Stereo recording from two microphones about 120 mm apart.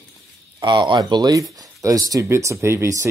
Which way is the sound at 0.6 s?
40° right (ahead or behind).